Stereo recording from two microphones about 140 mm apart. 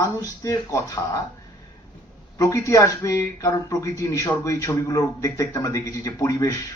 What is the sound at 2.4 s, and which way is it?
Speech, 20° left (ahead or behind).